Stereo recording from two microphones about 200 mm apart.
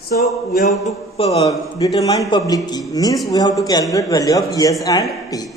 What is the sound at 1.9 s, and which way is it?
A man's voice, 15° left (ahead or behind).